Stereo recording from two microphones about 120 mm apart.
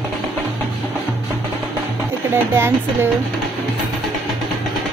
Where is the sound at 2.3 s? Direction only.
20° right (ahead or behind).